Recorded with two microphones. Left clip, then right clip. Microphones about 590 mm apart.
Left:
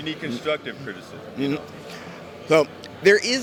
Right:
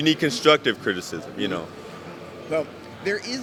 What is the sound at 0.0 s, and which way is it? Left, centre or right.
Speech, right.